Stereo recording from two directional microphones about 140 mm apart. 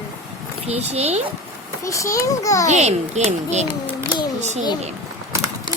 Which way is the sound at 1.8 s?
20° left (ahead or behind).